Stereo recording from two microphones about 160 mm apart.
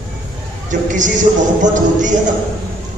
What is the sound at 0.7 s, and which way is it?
A man's voice, 50° right (ahead or behind).